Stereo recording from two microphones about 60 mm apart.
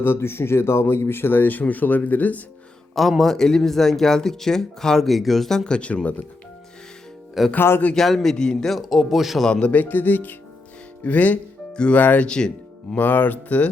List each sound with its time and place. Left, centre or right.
0.0 s speech: left
2.9 s speech: centre; by 6.2 s left
7.5 s speech: left
7.9 s speech: centre
9.5 s speech: centre
9.7 s music: left